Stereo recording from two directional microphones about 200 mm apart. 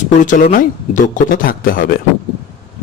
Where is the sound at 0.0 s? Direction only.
40° left (ahead or behind).